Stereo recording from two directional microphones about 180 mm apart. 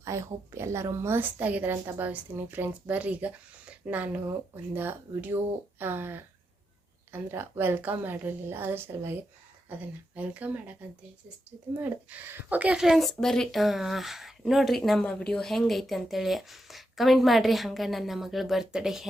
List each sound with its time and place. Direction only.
0.0 s a woman's voice: 15° right (ahead or behind)
10.2 s a woman's voice: 10° right (ahead or behind)
11.8 s speech: 10° right (ahead or behind)